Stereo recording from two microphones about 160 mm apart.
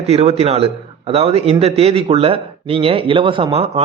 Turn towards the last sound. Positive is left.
turn(degrees=-40)  # may be behind; listen again after turning